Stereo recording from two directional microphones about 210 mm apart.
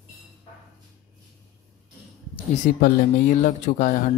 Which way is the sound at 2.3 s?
35° left (ahead or behind).